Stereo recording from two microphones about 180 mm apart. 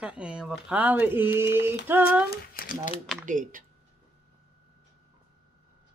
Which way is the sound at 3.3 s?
45° right (ahead or behind).